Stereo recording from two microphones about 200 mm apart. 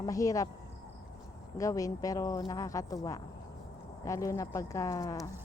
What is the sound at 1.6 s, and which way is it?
A woman's voice, 15° left (ahead or behind).